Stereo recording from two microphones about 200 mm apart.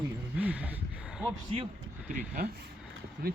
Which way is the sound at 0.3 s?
5° right (ahead or behind).